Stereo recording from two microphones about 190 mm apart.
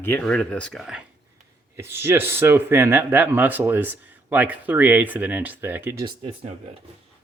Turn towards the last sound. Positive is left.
turn(degrees=-30)  # may be behind; listen again after turning